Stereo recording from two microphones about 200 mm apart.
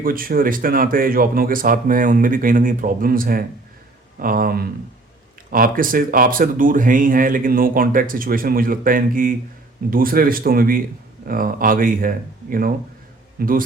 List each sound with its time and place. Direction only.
0.0 s speech: 45° right (ahead or behind)